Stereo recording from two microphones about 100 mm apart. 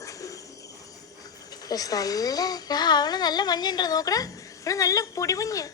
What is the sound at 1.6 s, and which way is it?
Speech, 40° left (ahead or behind).